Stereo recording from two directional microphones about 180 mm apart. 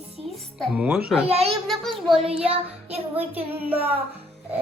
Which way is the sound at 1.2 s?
35° right (ahead or behind).